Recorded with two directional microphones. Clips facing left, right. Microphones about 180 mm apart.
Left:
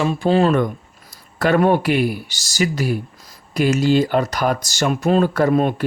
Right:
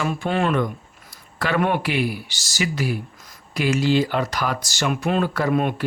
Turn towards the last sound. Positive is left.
turn(degrees=40)  # may be behind; listen again after turning